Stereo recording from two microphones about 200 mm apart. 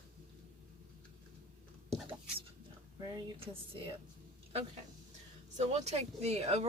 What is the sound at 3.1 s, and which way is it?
Speech, 25° right (ahead or behind).